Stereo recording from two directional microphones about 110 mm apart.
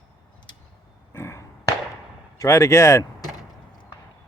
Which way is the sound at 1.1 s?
25° left (ahead or behind).